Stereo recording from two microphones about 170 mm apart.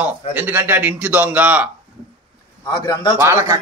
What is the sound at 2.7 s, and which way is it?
Speech, 25° left (ahead or behind).